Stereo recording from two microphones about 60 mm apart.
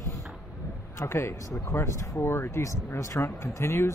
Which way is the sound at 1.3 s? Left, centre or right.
Left.